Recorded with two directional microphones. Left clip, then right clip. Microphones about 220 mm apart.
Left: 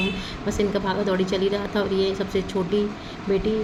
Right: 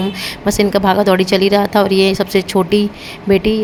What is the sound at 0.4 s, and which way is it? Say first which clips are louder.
Speech: right 11 dB; 50° right (ahead or behind).